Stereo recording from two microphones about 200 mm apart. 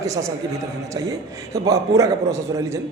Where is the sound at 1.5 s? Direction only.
15° right (ahead or behind).